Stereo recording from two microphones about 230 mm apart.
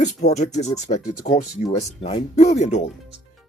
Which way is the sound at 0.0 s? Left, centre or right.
Left.